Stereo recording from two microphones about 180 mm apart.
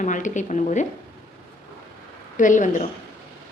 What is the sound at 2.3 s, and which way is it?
Speech, 45° left (ahead or behind).